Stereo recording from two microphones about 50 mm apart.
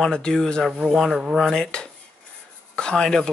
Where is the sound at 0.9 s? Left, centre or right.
Centre.